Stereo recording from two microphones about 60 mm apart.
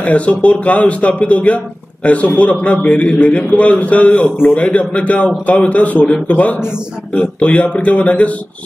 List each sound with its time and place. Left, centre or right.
0.0 s a man's voice: left